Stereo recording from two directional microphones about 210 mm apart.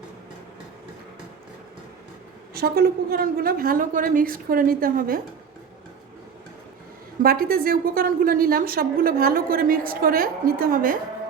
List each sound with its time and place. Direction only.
2.6 s a woman's voice: 45° right (ahead or behind)
7.2 s a woman's voice: 45° right (ahead or behind)